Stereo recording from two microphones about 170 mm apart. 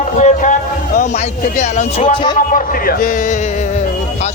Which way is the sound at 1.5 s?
45° left (ahead or behind).